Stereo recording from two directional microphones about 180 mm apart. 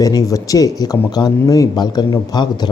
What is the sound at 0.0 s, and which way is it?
Speech, 20° left (ahead or behind).